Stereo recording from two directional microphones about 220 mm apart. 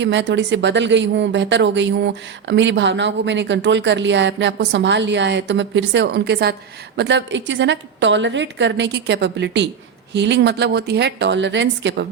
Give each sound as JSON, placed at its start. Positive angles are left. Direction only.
{"t": 0.0, "sound": "a woman's voice", "side_deg": -55}